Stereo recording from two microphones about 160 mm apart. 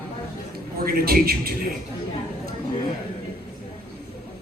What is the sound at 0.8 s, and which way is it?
Speech, 70° right (ahead or behind).